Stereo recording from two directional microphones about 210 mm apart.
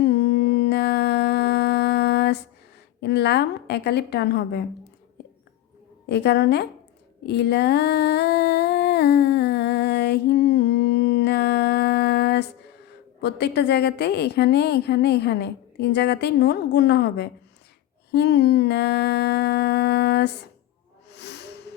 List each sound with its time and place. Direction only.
0.0 s a sound: 50° left (ahead or behind)
3.0 s a woman's voice: 50° left (ahead or behind)
6.1 s a woman's voice: 50° left (ahead or behind)
7.3 s humming: 50° left (ahead or behind)
13.2 s a woman's voice: 50° left (ahead or behind)
21.1 s hiss: 55° left (ahead or behind)